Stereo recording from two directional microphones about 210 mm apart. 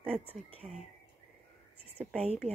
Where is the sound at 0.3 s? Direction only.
30° right (ahead or behind).